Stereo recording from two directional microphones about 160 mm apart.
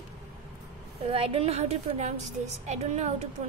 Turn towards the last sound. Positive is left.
turn(degrees=-45)  # may be behind; listen again after turning